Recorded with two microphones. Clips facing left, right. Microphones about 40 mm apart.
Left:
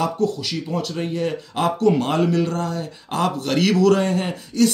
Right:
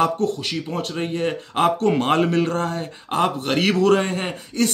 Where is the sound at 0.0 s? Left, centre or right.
Right.